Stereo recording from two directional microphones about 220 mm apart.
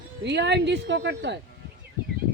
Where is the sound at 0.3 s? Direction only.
50° right (ahead or behind).